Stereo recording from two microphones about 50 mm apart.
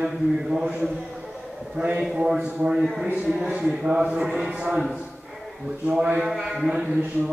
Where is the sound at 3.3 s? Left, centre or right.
Centre.